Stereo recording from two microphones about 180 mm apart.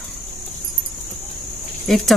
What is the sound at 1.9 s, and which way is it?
Speech, centre (ahead or behind).